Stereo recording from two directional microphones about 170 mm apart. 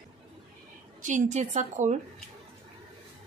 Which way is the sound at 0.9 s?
45° right (ahead or behind).